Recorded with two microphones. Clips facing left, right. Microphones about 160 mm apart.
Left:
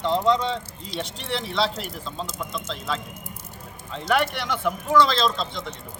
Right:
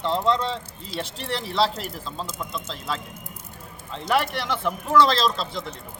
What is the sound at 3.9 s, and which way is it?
Speech, centre (ahead or behind).